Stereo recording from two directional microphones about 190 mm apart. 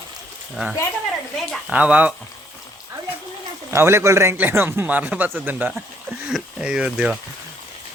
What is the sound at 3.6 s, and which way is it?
Speech, 15° right (ahead or behind).